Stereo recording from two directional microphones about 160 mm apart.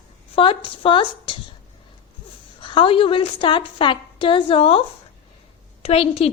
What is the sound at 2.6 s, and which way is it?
A woman's voice, 30° left (ahead or behind).